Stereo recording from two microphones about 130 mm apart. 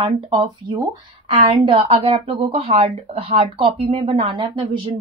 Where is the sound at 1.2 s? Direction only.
50° right (ahead or behind).